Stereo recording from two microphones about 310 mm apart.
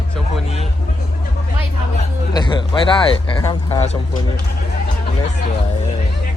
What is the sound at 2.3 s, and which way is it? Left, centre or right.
Speech, centre.